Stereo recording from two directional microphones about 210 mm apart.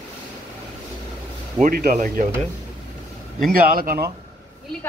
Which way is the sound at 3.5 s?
45° right (ahead or behind).